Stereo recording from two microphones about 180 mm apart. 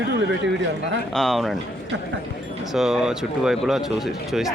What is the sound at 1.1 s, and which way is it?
Speech, centre (ahead or behind).